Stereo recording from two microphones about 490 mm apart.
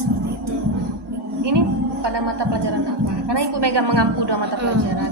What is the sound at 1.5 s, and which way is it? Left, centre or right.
A woman's voice, right.